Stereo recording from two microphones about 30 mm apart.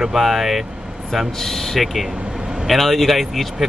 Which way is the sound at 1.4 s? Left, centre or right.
Centre.